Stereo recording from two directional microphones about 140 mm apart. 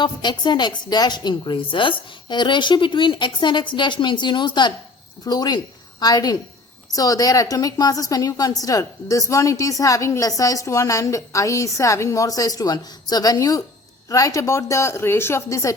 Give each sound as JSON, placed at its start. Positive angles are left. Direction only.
{"t": 0.0, "sound": "a woman's voice", "side_deg": 30}